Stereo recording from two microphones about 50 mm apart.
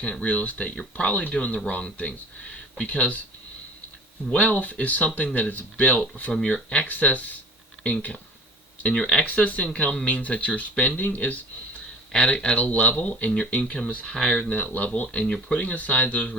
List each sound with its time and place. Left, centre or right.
0.0 s speech: left
4.3 s speech: left
6.5 s speech: left
6.8 s speech: left
8.8 s speech: centre
9.2 s speech: left
9.6 s speech: centre
12.3 s speech: centre
12.5 s speech: left
14.0 s speech: centre
14.5 s speech: left